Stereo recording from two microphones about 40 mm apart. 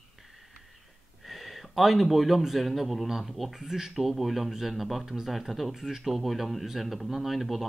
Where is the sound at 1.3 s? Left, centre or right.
Centre.